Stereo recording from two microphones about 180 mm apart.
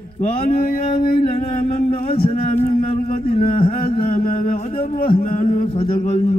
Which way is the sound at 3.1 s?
50° left (ahead or behind).